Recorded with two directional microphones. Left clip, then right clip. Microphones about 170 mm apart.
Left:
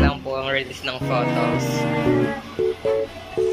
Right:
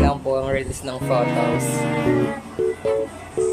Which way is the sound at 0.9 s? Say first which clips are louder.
Right 2 dB; centre (ahead or behind).